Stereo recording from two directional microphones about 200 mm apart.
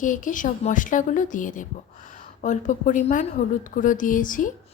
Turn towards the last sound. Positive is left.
turn(degrees=40)  # may be behind; listen again after turning